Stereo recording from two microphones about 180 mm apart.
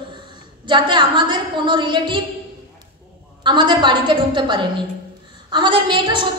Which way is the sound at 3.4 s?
25° right (ahead or behind).